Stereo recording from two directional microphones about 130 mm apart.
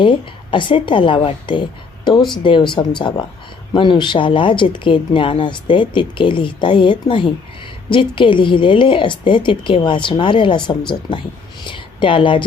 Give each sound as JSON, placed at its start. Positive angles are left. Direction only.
{"t": 0.0, "sound": "speech", "side_deg": 40}